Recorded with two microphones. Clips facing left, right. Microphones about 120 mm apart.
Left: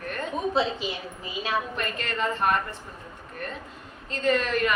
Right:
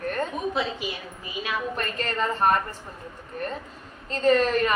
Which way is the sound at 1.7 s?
40° right (ahead or behind).